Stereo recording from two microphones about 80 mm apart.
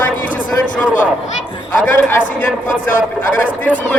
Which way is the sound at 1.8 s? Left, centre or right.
Left.